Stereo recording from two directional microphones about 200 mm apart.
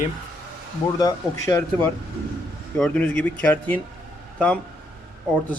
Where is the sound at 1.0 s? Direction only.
15° left (ahead or behind).